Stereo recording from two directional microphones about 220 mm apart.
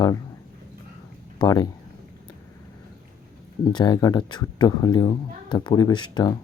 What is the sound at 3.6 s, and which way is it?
Speech, 20° left (ahead or behind).